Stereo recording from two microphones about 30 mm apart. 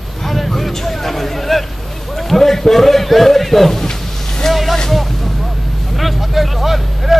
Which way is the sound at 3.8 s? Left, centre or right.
Centre.